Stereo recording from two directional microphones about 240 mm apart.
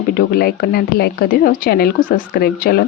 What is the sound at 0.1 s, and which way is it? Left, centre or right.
Speech, left.